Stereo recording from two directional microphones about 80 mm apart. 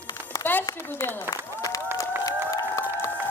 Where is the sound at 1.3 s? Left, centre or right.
Left.